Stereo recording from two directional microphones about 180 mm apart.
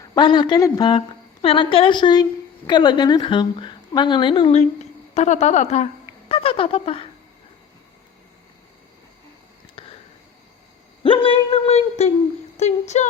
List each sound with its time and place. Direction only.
0.1 s a woman's voice: 25° left (ahead or behind)
9.8 s a sound: 30° left (ahead or behind)
11.0 s speech: 30° left (ahead or behind)